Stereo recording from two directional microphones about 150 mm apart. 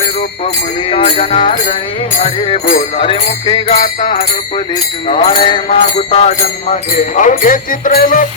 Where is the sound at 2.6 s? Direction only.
55° left (ahead or behind).